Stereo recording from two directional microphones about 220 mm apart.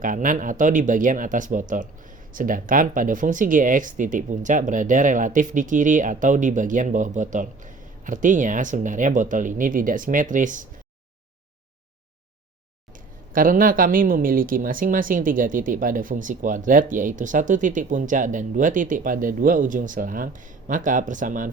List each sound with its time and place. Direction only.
0.0 s speech: 40° right (ahead or behind)
13.3 s speech: 40° right (ahead or behind)